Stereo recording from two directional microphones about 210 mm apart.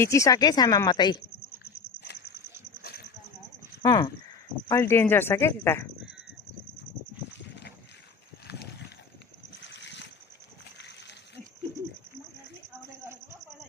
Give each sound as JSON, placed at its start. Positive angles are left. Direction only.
{"t": 0.0, "sound": "speech", "side_deg": 15}
{"t": 3.8, "sound": "speech", "side_deg": 20}
{"t": 9.6, "sound": "boat", "side_deg": 55}